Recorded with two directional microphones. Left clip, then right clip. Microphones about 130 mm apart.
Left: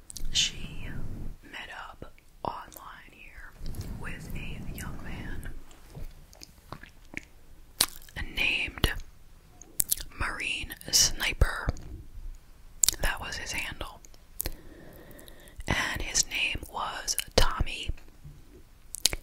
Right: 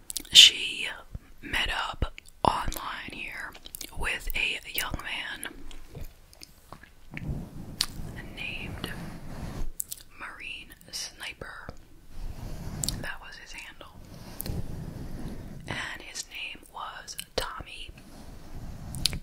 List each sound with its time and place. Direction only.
0.1 s whispering: 25° right (ahead or behind)
7.1 s squish: 20° left (ahead or behind)
7.7 s whispering: 45° left (ahead or behind)
12.8 s whispering: 40° left (ahead or behind)
15.6 s whispering: 40° left (ahead or behind)
19.0 s chewing: 35° left (ahead or behind)